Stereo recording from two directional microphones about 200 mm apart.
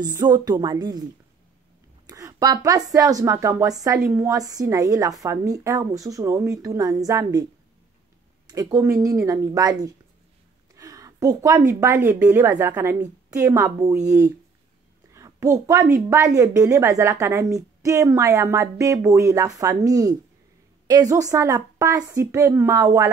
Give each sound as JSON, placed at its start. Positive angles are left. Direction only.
{"t": 0.0, "sound": "speech", "side_deg": -20}
{"t": 2.0, "sound": "a woman's voice", "side_deg": -15}
{"t": 8.5, "sound": "a woman's voice", "side_deg": -20}